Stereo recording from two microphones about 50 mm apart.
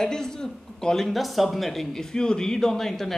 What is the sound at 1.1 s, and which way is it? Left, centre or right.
Speech, centre.